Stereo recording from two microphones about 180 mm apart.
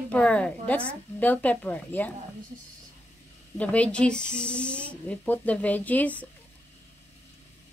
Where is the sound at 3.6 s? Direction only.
10° left (ahead or behind).